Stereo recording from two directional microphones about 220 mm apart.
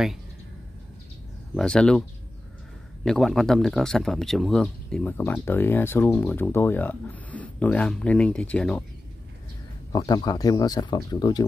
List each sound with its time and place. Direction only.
1.5 s speech: 5° left (ahead or behind)
3.1 s speech: centre (ahead or behind)
9.9 s speech: 20° left (ahead or behind)